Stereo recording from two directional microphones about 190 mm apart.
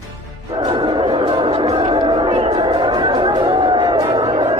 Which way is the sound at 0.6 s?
25° right (ahead or behind).